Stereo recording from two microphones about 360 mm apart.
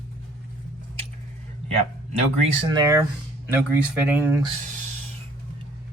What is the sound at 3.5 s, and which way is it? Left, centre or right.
Speech, centre.